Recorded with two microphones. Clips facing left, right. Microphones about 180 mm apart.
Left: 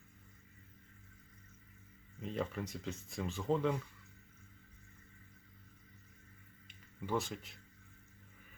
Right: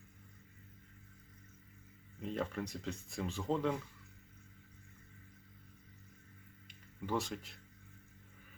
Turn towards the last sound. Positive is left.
turn(degrees=0)  # may be behind; listen again after turning